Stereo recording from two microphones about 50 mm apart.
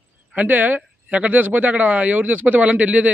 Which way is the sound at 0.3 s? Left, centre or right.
Right.